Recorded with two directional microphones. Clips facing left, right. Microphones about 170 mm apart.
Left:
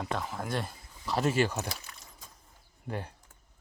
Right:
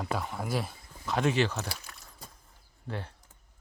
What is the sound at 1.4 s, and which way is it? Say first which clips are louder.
Speech: even; 10° left (ahead or behind).